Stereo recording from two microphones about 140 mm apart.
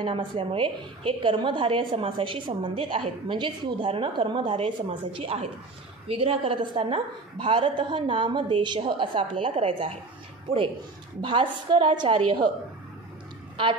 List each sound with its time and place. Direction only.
0.0 s a woman's voice: 40° right (ahead or behind)
11.1 s a woman's voice: 35° right (ahead or behind)